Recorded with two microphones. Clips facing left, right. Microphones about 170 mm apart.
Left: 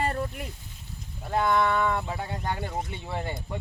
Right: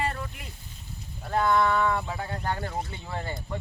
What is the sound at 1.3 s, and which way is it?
Speech, 15° left (ahead or behind).